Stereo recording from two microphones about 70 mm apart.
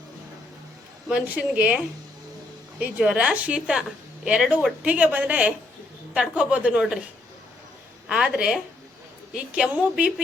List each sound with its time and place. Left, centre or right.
1.1 s a woman's voice: centre
2.7 s a woman's voice: centre
3.2 s a woman's voice: centre
4.9 s a woman's voice: right
8.0 s a woman's voice: centre